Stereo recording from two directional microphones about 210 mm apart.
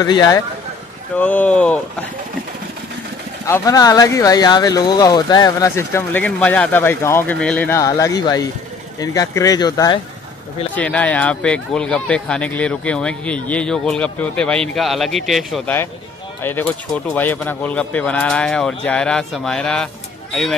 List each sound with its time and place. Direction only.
0.0 s a man's voice: 20° left (ahead or behind)
1.1 s speech: 10° left (ahead or behind)
3.4 s speech: 15° left (ahead or behind)
10.8 s speech: 5° left (ahead or behind)